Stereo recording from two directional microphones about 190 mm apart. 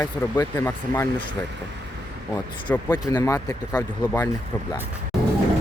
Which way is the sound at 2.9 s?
20° left (ahead or behind).